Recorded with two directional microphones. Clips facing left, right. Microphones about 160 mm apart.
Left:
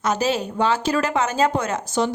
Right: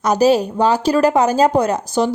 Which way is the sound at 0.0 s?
40° right (ahead or behind).